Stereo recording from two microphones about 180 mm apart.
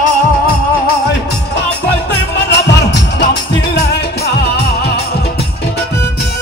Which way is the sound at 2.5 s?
75° left (ahead or behind).